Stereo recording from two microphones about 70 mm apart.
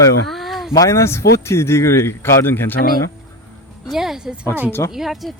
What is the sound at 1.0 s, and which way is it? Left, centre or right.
Speech, left.